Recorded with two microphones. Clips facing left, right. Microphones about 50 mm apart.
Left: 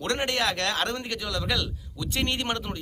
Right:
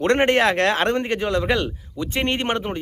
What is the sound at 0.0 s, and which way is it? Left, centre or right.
A man's voice, right.